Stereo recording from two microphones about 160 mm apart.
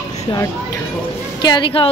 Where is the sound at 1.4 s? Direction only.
30° left (ahead or behind).